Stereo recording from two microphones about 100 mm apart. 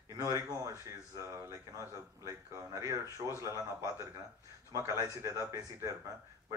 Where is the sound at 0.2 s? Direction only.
30° right (ahead or behind).